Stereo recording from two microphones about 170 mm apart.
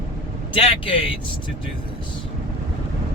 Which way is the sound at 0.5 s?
30° left (ahead or behind).